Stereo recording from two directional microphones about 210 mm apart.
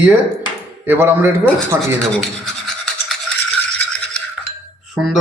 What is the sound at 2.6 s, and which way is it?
Toothbrush, centre (ahead or behind).